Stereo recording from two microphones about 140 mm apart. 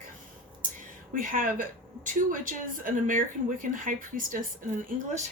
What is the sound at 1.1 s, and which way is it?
A woman's voice, 80° right.